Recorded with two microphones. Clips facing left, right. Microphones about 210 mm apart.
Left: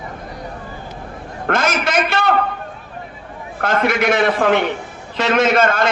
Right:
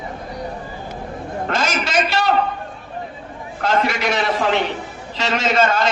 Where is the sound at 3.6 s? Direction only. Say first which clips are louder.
Left 3 dB; 55° left (ahead or behind).